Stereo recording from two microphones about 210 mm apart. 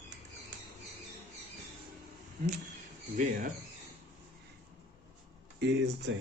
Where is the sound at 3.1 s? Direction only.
40° right (ahead or behind).